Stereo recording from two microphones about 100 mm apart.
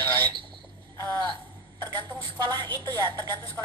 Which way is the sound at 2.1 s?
45° right (ahead or behind).